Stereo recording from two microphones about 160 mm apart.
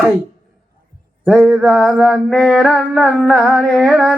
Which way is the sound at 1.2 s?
10° right (ahead or behind).